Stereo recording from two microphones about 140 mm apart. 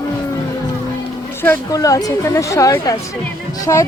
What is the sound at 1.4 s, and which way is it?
A woman's voice, 20° left (ahead or behind).